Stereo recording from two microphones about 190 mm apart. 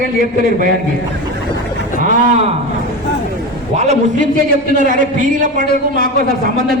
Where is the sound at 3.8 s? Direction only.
40° right (ahead or behind).